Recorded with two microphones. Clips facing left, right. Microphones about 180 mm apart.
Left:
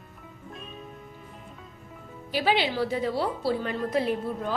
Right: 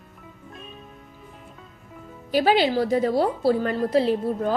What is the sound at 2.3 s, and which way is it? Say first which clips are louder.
A woman's voice: right 6 dB; 45° right (ahead or behind).